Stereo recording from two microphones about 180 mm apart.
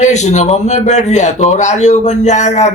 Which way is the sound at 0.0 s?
40° left (ahead or behind).